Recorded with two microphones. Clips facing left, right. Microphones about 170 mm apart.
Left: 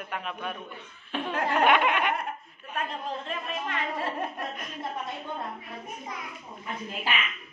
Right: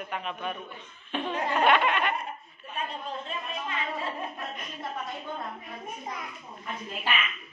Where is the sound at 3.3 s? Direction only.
65° left (ahead or behind).